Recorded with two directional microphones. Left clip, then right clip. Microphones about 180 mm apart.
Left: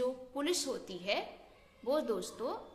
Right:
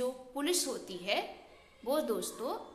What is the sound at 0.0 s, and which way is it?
A woman's voice, 20° left (ahead or behind).